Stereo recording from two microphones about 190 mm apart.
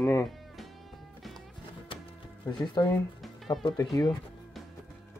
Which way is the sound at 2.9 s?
Centre (ahead or behind).